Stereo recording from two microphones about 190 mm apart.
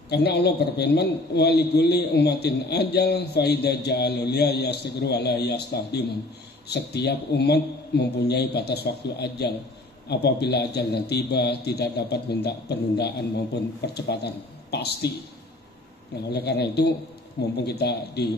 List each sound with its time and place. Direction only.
0.1 s a man's voice: 60° left (ahead or behind)
16.3 s a man's voice: 60° left (ahead or behind)